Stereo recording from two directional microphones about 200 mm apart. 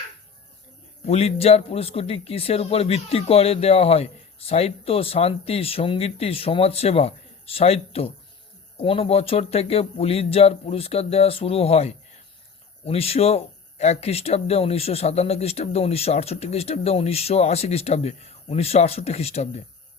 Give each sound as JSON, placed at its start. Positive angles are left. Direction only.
{"t": 1.0, "sound": "speech", "side_deg": 30}